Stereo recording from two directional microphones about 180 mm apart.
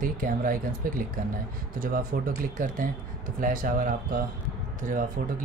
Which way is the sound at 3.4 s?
50° right (ahead or behind).